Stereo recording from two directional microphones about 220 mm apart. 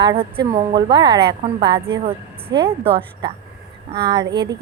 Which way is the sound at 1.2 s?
50° right (ahead or behind).